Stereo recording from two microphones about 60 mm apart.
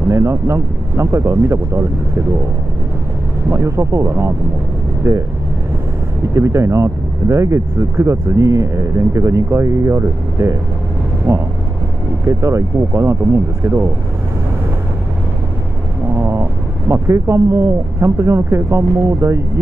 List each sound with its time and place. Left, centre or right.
0.1 s speech: right
3.4 s speech: right
5.1 s speech: right
6.3 s speech: right
16.2 s speech: right